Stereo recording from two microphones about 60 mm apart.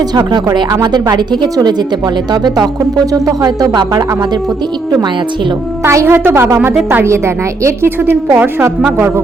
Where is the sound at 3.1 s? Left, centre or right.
Right.